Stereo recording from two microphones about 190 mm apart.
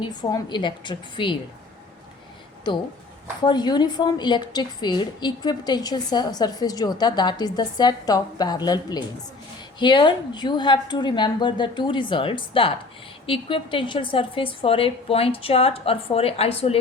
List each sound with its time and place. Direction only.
0.0 s a woman's voice: 20° left (ahead or behind)
3.4 s a woman's voice: 25° left (ahead or behind)